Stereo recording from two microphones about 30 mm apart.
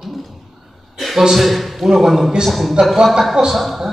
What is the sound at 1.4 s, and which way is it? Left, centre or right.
Speech, centre.